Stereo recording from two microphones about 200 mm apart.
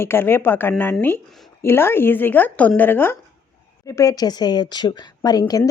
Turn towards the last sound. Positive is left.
turn(degrees=20)  # may be behind; listen again after turning